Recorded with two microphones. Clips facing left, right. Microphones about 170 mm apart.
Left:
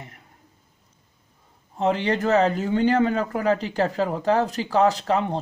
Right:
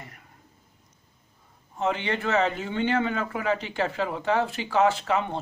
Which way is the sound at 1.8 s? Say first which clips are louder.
Left 5 dB; 35° left (ahead or behind).